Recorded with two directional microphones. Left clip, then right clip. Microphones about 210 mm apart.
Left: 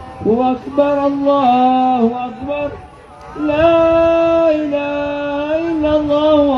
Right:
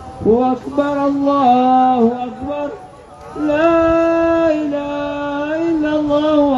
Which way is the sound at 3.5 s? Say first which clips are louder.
Left 2 dB; 35° left (ahead or behind).